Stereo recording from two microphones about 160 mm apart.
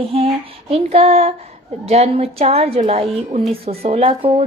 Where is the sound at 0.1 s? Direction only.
40° right (ahead or behind).